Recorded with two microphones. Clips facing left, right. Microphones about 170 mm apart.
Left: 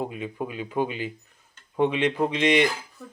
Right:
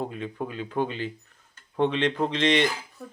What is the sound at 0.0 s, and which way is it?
Speech, 10° left (ahead or behind).